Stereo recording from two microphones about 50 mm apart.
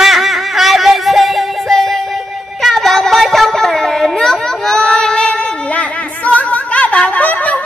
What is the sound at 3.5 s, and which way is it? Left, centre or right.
Child singing, centre.